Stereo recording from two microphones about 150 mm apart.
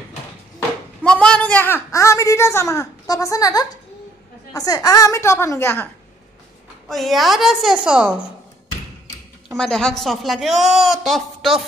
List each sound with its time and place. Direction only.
1.0 s a woman's voice: 5° left (ahead or behind)
6.9 s a woman's voice: centre (ahead or behind)
9.5 s a woman's voice: 5° left (ahead or behind)